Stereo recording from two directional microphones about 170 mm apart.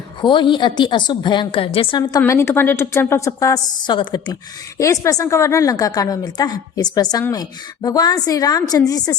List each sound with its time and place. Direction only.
0.2 s a woman's voice: 30° left (ahead or behind)